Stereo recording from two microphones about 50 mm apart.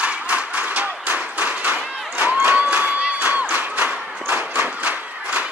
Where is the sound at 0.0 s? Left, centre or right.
Right.